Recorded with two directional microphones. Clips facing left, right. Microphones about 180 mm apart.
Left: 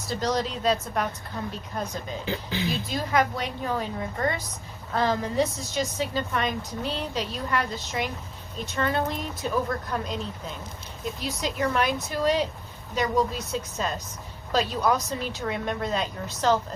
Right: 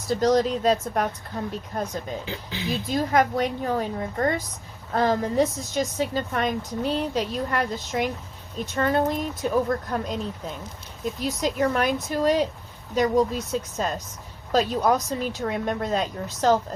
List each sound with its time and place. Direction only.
0.1 s a woman's voice: 45° right (ahead or behind)
2.9 s a woman's voice: 45° right (ahead or behind)